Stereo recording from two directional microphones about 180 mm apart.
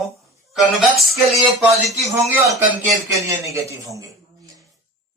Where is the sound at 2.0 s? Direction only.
15° right (ahead or behind).